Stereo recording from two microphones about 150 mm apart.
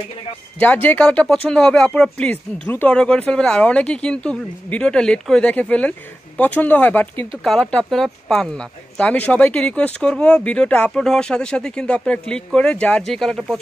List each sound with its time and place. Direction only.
0.6 s speech: 10° left (ahead or behind)